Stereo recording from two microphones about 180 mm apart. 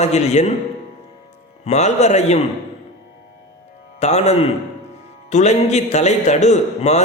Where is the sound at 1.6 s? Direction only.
40° left (ahead or behind).